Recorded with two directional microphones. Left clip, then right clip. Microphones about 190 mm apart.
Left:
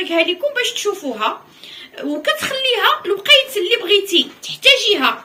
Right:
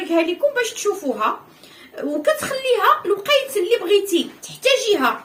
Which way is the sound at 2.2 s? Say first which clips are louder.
Left 1 dB; 30° right (ahead or behind).